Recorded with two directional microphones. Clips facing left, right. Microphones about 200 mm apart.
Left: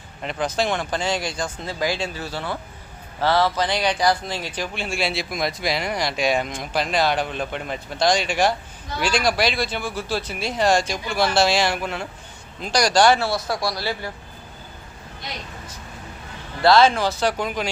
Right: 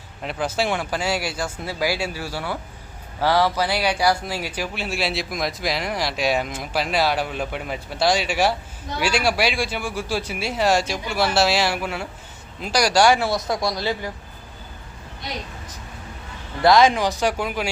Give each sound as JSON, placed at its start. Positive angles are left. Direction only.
{"t": 0.2, "sound": "speech", "side_deg": -5}
{"t": 16.6, "sound": "speech", "side_deg": -15}